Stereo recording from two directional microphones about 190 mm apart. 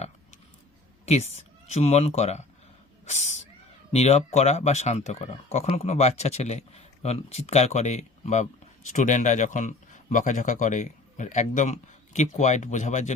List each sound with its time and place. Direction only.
1.0 s speech: 35° left (ahead or behind)